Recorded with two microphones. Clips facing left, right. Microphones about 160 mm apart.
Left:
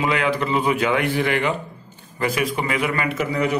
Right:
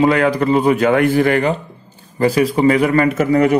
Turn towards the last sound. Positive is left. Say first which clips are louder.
# right 9 dB
turn(degrees=-50)  # may be behind; listen again after turning